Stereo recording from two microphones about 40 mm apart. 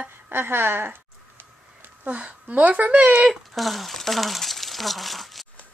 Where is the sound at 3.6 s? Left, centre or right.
Centre.